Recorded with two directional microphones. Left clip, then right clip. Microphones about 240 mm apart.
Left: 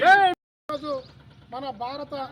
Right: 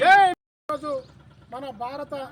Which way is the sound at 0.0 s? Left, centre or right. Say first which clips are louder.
Right 1 dB; centre.